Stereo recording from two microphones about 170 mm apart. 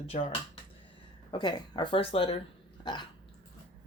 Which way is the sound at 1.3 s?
25° left (ahead or behind).